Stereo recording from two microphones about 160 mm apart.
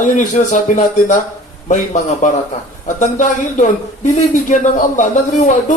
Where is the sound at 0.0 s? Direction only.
50° left (ahead or behind).